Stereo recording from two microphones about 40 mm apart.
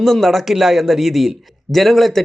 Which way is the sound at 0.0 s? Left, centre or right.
Centre.